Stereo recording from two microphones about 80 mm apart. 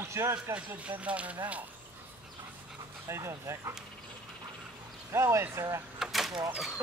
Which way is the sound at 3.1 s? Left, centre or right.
Right.